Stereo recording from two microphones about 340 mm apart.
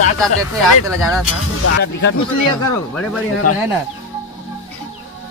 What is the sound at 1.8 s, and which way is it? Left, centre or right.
Speech, left.